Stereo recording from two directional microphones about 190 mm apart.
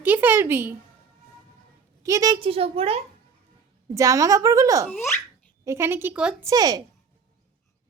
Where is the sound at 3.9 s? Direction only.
15° right (ahead or behind).